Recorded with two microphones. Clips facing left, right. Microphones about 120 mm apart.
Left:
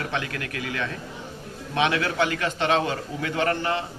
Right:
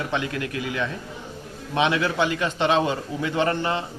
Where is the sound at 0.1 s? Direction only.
25° right (ahead or behind).